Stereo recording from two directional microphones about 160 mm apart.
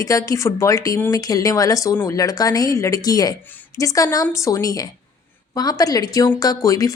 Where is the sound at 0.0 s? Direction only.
20° left (ahead or behind).